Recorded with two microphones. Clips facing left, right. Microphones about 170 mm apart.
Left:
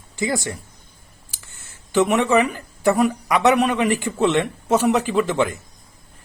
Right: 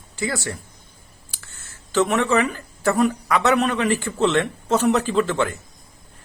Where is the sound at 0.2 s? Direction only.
20° left (ahead or behind).